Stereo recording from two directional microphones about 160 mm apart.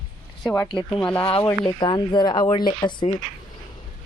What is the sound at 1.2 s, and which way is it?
Speech, 35° left (ahead or behind).